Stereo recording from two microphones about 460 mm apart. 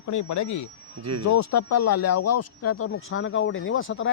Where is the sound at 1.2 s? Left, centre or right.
Left.